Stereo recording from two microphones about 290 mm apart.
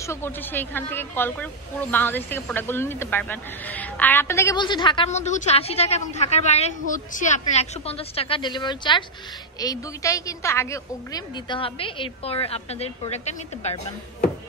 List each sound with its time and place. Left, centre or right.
0.0 s a woman's voice: centre